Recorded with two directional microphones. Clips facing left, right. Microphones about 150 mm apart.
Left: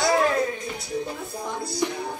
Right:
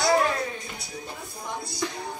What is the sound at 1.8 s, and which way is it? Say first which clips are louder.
Music: left 5 dB; 20° left (ahead or behind).